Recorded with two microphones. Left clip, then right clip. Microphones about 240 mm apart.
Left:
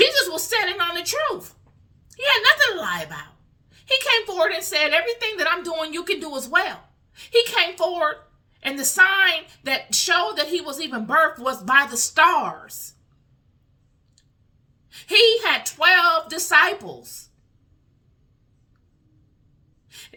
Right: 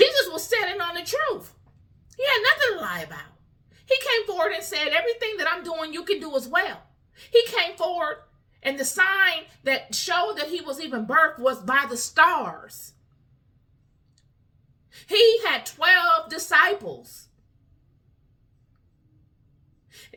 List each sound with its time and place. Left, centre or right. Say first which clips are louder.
0.0 s a sound: left 1 dB; centre
3.7 s a woman's voice: left 3 dB; centre
15.0 s a woman's voice: left 2 dB; centre